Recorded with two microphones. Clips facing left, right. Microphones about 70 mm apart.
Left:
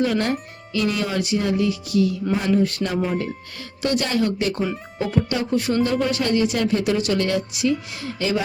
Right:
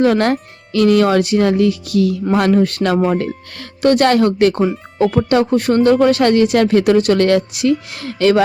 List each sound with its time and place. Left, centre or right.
0.0 s speech: right